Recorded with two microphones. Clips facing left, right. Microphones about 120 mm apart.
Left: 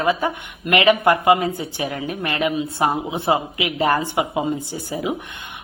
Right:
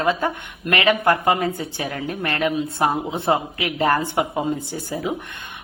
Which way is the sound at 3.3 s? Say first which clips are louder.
Left 1 dB; 15° left (ahead or behind).